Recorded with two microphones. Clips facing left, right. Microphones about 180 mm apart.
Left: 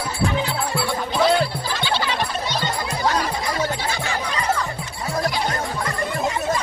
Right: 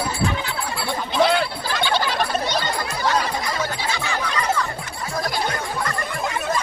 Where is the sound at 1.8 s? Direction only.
50° right (ahead or behind).